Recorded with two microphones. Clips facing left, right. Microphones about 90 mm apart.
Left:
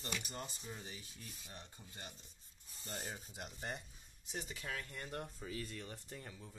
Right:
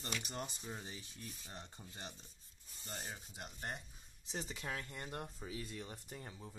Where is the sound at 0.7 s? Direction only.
30° right (ahead or behind).